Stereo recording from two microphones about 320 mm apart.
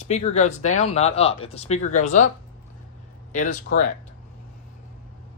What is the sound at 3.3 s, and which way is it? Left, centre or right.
Speech, left.